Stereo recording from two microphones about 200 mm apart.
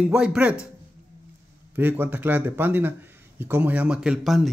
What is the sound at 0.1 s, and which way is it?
Speech, 5° right (ahead or behind).